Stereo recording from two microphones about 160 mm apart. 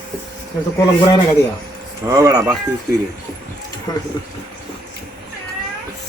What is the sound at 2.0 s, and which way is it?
Speech, 20° right (ahead or behind).